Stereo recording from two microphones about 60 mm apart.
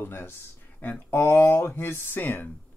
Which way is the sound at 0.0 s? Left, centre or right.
Left.